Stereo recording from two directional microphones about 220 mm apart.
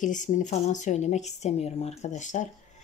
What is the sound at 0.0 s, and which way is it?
Speech, 35° left (ahead or behind).